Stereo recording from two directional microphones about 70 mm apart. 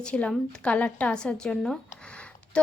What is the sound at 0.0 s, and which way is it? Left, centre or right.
A woman's voice, centre.